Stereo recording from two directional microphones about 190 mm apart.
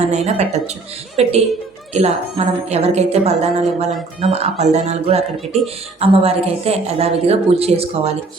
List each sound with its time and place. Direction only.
0.0 s a woman's voice: 35° right (ahead or behind)